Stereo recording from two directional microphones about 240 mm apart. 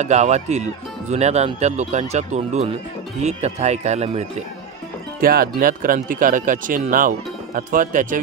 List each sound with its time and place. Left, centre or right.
0.0 s speech: right
5.2 s speech: right